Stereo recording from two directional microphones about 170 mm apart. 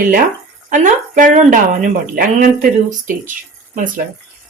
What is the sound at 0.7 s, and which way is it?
Speech, 50° right (ahead or behind).